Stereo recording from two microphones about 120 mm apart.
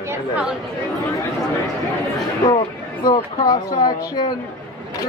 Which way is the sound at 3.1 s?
35° left (ahead or behind).